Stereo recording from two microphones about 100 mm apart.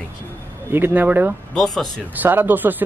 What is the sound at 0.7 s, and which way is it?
Speech, 20° right (ahead or behind).